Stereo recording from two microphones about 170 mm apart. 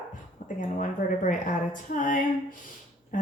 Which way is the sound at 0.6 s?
50° left (ahead or behind).